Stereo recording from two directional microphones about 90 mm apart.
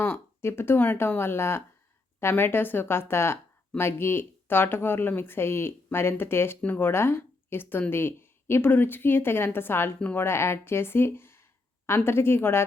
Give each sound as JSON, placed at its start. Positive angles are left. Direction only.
{"t": 0.0, "sound": "speech", "side_deg": 25}